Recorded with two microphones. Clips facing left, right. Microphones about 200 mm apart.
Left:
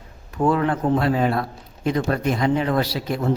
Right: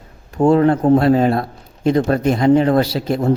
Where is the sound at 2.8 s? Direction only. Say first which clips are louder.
Right 6 dB; 25° right (ahead or behind).